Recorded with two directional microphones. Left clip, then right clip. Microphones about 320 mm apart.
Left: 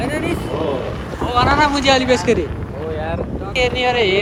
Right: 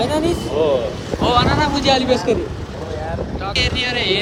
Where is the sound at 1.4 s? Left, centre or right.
Centre.